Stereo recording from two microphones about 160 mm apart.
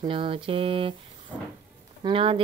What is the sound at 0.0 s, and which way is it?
Mantra, 35° right (ahead or behind).